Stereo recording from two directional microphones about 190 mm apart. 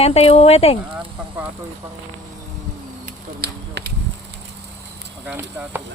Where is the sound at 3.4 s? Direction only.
55° right (ahead or behind).